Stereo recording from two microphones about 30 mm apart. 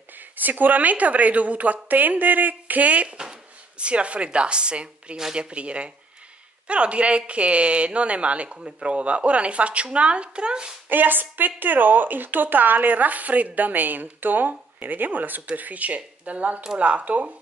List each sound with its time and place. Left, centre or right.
0.2 s a woman's voice: right
2.0 s speech: right
3.7 s a woman's voice: right
10.9 s speech: right
14.8 s speech: right
15.5 s a woman's voice: right